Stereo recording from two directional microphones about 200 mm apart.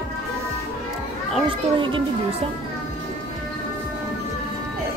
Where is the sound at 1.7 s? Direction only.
25° right (ahead or behind).